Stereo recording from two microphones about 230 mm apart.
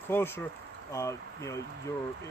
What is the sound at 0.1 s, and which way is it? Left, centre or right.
Speech, centre.